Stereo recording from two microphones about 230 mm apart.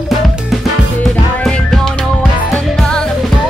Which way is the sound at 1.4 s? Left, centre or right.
Centre.